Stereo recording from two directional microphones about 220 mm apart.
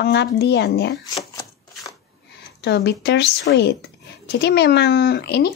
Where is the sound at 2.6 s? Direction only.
50° left (ahead or behind).